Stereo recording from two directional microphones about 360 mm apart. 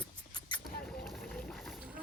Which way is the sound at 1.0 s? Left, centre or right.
Centre.